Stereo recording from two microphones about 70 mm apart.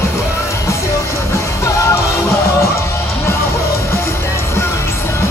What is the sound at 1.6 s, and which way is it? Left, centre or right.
Music, left.